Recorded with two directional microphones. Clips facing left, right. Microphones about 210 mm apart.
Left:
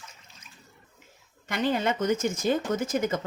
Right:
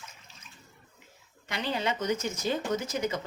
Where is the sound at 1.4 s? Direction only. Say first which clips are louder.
Left 5 dB; 50° left (ahead or behind).